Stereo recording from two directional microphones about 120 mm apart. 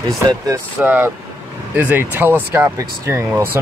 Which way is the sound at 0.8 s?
15° right (ahead or behind).